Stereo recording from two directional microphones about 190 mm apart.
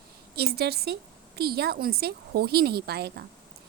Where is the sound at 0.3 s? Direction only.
55° right (ahead or behind).